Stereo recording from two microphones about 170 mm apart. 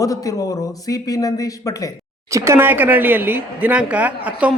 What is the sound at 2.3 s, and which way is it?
Speech, 15° right (ahead or behind).